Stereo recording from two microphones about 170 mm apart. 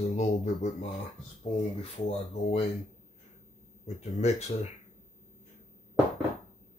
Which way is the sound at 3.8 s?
40° left (ahead or behind).